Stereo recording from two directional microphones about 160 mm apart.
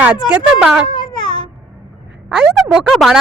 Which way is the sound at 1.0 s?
30° left (ahead or behind).